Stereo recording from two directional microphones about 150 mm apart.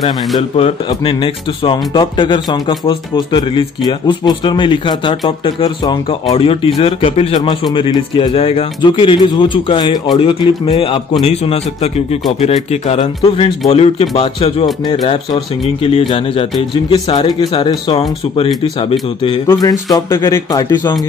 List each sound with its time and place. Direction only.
0.4 s speech: 40° left (ahead or behind)
8.4 s speech: 40° left (ahead or behind)
17.3 s speech: 25° left (ahead or behind)
19.4 s speech: 20° left (ahead or behind)